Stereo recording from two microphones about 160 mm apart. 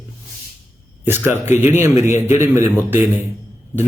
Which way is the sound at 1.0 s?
10° right (ahead or behind).